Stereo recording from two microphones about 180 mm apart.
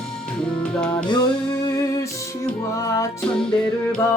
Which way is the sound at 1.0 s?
25° left (ahead or behind).